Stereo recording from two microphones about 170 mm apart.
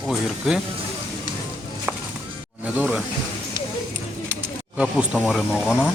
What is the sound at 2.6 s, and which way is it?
Speech, 5° right (ahead or behind).